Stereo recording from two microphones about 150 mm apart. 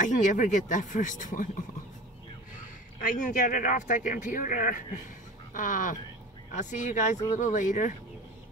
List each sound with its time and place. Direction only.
0.0 s speech: 55° left (ahead or behind)
2.6 s speech: 60° left (ahead or behind)